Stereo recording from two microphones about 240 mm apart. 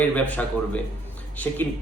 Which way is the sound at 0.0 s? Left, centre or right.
Centre.